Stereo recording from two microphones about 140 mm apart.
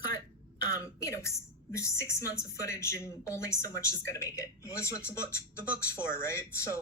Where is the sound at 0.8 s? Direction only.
20° left (ahead or behind).